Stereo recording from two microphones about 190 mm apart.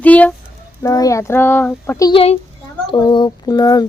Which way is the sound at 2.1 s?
30° left (ahead or behind).